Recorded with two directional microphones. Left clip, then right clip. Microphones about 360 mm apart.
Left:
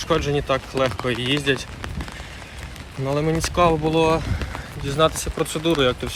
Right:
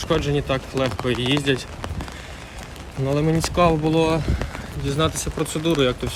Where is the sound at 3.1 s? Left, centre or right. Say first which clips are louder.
Even; centre.